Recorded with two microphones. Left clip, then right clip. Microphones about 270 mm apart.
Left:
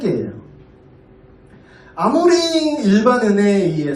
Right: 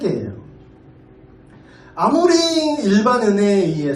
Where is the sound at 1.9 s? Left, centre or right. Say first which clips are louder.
Even; right.